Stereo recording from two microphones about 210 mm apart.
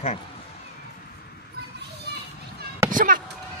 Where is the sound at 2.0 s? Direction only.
50° right (ahead or behind).